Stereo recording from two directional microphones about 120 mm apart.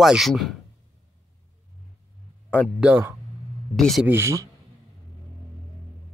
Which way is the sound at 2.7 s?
15° right (ahead or behind).